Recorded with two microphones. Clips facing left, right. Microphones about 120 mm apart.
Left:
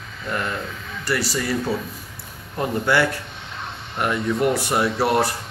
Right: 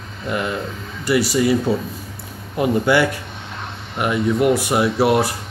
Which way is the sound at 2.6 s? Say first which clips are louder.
Right 4 dB; 15° right (ahead or behind).